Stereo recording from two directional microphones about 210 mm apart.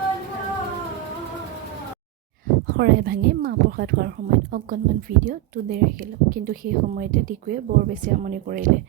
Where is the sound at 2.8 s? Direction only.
45° right (ahead or behind).